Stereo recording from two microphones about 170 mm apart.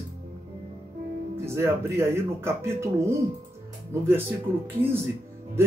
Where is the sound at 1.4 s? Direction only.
15° right (ahead or behind).